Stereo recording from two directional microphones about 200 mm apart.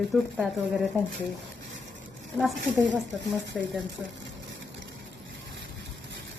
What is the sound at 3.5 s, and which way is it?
Speech, centre (ahead or behind).